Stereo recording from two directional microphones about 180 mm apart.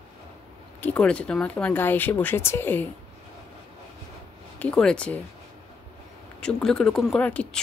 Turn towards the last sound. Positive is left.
turn(degrees=5)  # may be behind; listen again after turning